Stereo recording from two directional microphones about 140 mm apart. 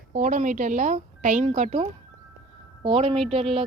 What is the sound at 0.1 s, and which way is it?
A woman's voice, 65° right (ahead or behind).